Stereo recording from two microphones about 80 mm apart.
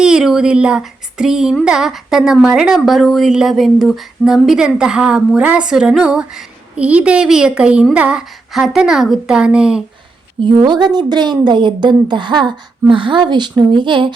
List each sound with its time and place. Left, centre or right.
0.0 s speech: centre
0.8 s a sound: centre
1.6 s a woman's voice: centre
8.5 s speech: centre
10.4 s a woman's voice: right